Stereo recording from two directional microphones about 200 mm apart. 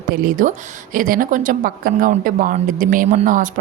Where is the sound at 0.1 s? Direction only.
45° right (ahead or behind).